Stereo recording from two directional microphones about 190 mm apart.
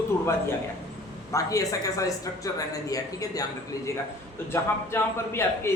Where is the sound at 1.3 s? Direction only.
15° left (ahead or behind).